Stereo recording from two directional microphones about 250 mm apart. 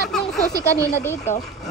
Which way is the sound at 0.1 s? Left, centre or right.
Centre.